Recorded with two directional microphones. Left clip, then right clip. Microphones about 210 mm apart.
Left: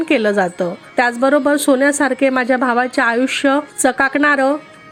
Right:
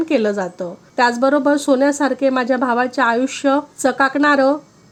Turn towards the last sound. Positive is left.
turn(degrees=5)  # may be behind; listen again after turning